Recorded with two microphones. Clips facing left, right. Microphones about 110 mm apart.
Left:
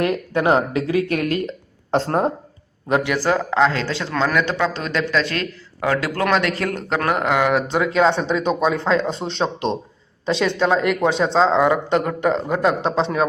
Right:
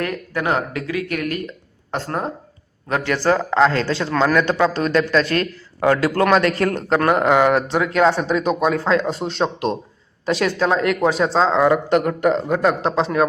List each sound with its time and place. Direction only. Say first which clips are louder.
0.0 s speech: left 4 dB; 20° left (ahead or behind)
2.9 s a man's voice: even; 10° left (ahead or behind)